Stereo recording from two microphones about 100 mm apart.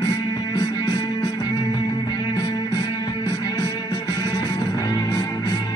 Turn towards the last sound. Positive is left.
turn(degrees=40)  # may be behind; listen again after turning